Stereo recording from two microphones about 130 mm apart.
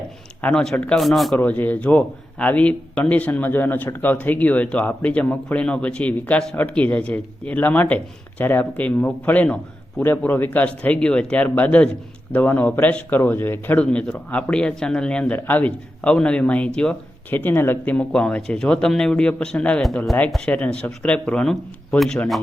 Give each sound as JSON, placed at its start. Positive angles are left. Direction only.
{"t": 0.4, "sound": "speech", "side_deg": 5}
{"t": 1.4, "sound": "speech", "side_deg": 15}